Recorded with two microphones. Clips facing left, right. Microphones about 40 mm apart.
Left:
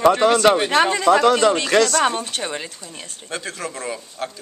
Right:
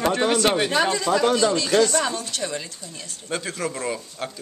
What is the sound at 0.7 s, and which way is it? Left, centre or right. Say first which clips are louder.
Speech: left 5 dB; left.